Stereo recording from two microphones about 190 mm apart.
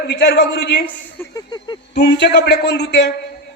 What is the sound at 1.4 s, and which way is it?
Speech, 25° left (ahead or behind).